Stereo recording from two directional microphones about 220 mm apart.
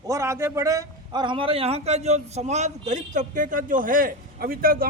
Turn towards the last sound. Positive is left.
turn(degrees=-40)  # may be behind; listen again after turning